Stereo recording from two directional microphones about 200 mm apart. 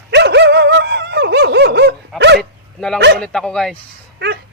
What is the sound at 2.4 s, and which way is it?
Dog, 5° left (ahead or behind).